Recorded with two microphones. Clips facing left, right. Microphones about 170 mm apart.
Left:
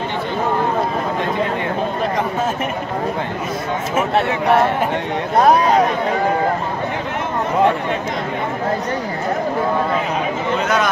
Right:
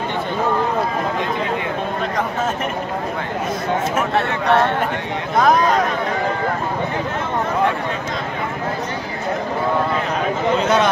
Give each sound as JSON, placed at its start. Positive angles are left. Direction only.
{"t": 5.3, "sound": "speech", "side_deg": 35}